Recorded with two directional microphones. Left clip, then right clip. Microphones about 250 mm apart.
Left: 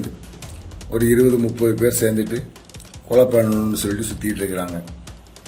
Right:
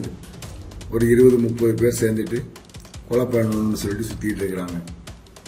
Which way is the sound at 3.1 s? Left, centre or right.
Centre.